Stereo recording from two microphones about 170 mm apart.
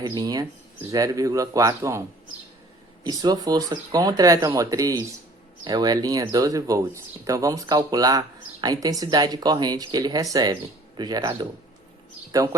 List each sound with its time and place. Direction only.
0.2 s speech: 20° right (ahead or behind)